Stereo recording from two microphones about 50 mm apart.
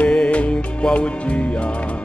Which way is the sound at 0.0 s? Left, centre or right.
Left.